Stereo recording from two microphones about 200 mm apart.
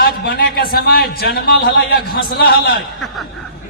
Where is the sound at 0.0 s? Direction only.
50° left (ahead or behind).